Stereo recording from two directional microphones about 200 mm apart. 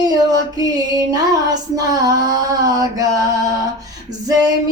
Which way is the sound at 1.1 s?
20° right (ahead or behind).